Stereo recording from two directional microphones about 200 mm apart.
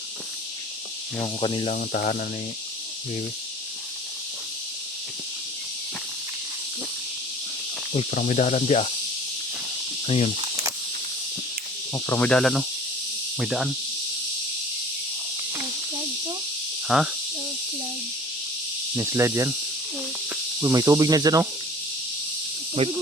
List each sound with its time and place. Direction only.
1.2 s speech: 25° left (ahead or behind)
1.7 s speech: 45° left (ahead or behind)
7.9 s cricket: 40° left (ahead or behind)
10.1 s cricket: 30° left (ahead or behind)
11.9 s speech: 10° left (ahead or behind)
16.9 s speech: 5° right (ahead or behind)
18.9 s speech: 15° right (ahead or behind)
22.8 s speech: 30° right (ahead or behind)